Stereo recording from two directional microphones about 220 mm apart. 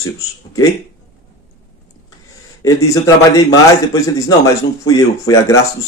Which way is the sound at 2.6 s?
15° left (ahead or behind).